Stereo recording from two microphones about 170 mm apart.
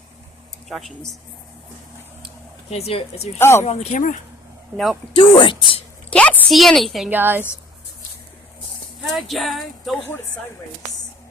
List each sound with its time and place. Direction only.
0.7 s speech: centre (ahead or behind)
2.6 s speech: 40° left (ahead or behind)
3.3 s speech: 15° left (ahead or behind)
3.7 s speech: 45° left (ahead or behind)
5.1 s speech: 30° left (ahead or behind)
6.1 s a woman's voice: 5° left (ahead or behind)
7.1 s a woman's voice: 10° right (ahead or behind)
9.0 s speech: centre (ahead or behind)